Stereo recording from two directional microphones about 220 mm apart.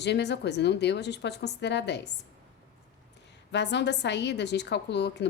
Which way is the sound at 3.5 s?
50° left (ahead or behind).